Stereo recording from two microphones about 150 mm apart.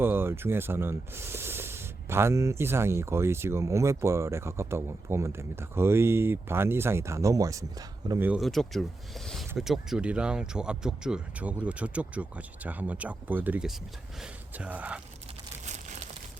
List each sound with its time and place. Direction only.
0.0 s speech: 15° right (ahead or behind)
8.4 s speech: centre (ahead or behind)
15.6 s crumpling: 50° right (ahead or behind)